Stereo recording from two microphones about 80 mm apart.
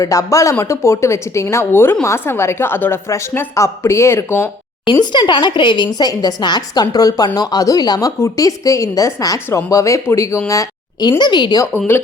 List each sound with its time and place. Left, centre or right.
0.0 s a woman's voice: left
4.9 s a woman's voice: left
11.2 s a woman's voice: left